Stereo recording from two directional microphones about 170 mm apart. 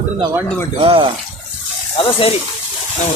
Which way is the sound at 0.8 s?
30° right (ahead or behind).